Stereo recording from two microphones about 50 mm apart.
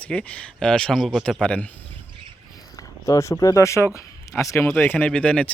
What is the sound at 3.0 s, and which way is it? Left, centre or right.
Speech, left.